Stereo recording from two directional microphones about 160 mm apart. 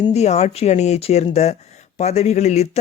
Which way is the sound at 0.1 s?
45° left (ahead or behind).